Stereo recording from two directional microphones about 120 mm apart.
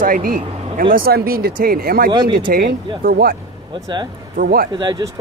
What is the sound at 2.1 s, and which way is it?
Speech, 40° right (ahead or behind).